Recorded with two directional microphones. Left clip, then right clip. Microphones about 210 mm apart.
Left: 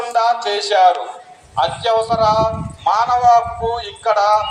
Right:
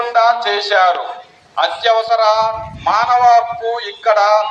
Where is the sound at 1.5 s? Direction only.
65° left (ahead or behind).